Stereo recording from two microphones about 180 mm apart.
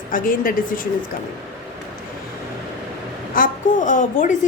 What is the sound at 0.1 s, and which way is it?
Speech, 50° left (ahead or behind).